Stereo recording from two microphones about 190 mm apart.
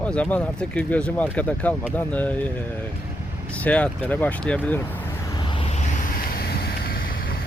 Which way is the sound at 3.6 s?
5° left (ahead or behind).